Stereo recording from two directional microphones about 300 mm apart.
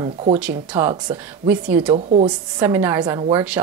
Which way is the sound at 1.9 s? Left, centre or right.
Right.